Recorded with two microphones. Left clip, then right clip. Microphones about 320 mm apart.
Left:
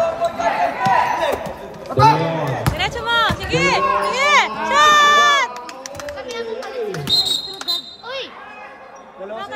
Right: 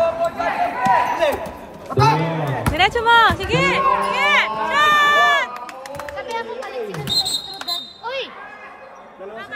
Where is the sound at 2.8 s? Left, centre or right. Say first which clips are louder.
Right 6 dB; right.